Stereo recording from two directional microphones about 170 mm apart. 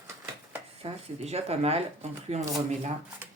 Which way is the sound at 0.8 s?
35° right (ahead or behind).